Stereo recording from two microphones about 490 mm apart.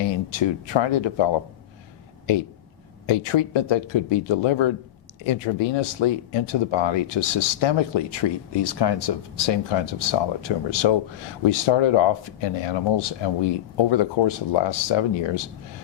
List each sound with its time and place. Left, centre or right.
0.0 s speech: left
3.1 s speech: left
9.3 s speech: left